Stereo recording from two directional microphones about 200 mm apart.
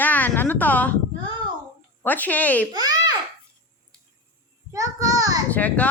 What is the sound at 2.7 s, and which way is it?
Babbling, 20° right (ahead or behind).